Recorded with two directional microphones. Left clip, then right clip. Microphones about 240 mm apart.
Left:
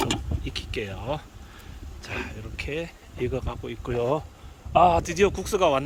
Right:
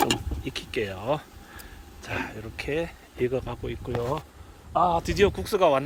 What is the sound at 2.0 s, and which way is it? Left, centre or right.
Speech, centre.